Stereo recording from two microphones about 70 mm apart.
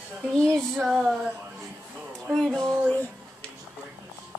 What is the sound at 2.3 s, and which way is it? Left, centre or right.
Speech, centre.